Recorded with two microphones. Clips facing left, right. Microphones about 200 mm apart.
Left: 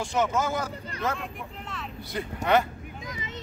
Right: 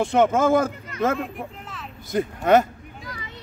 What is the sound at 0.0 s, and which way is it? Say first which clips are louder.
Speech: right 8 dB; 55° right (ahead or behind).